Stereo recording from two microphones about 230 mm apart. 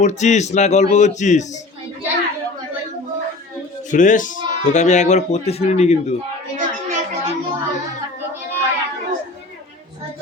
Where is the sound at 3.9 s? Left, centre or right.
Left.